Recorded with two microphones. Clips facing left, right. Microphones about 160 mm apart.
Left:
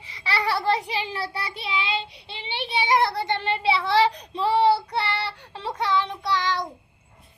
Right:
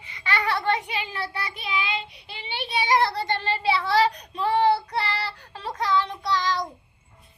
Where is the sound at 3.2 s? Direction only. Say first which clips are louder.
Left 1 dB; 20° left (ahead or behind).